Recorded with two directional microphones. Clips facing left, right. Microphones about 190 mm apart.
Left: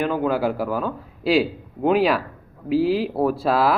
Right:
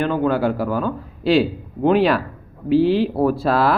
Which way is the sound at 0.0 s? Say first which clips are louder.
Right 2 dB; 5° left (ahead or behind).